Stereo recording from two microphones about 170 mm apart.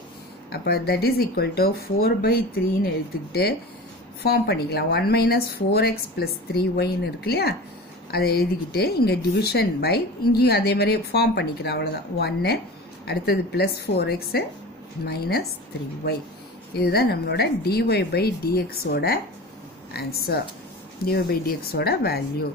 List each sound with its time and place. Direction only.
0.5 s speech: 70° left (ahead or behind)
4.2 s speech: 70° left (ahead or behind)
16.7 s speech: 65° left (ahead or behind)